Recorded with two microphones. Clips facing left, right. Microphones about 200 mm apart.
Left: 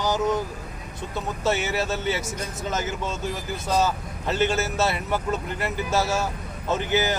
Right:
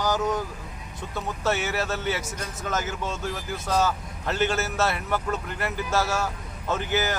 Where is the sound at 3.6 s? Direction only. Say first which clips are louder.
Left 1 dB; 20° left (ahead or behind).